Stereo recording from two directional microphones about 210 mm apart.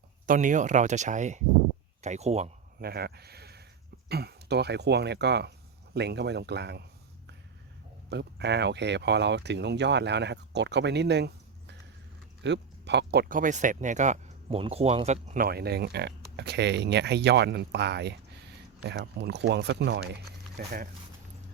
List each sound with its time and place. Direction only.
0.3 s speech: 35° right (ahead or behind)
2.8 s speech: 50° right (ahead or behind)
8.1 s speech: 55° right (ahead or behind)
12.4 s speech: 55° right (ahead or behind)